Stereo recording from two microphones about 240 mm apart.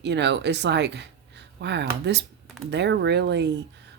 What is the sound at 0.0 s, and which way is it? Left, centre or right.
Speech, right.